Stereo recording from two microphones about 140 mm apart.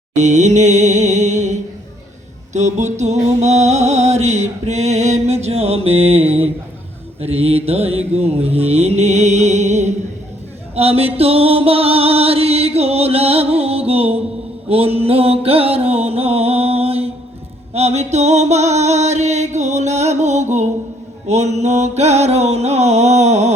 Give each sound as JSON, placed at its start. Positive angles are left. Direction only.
{"t": 0.2, "sound": "mantra", "side_deg": -55}
{"t": 2.5, "sound": "music", "side_deg": -55}
{"t": 7.2, "sound": "mantra", "side_deg": -45}
{"t": 10.8, "sound": "music", "side_deg": -45}
{"t": 14.7, "sound": "mantra", "side_deg": -45}
{"t": 17.7, "sound": "music", "side_deg": -50}